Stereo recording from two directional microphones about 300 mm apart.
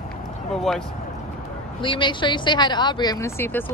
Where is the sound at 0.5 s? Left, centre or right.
Centre.